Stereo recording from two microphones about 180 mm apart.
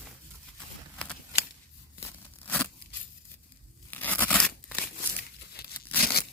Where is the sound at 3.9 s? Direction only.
10° left (ahead or behind).